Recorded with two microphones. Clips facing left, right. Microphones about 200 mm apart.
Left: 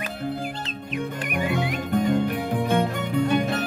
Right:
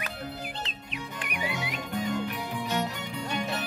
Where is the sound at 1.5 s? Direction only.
55° left (ahead or behind).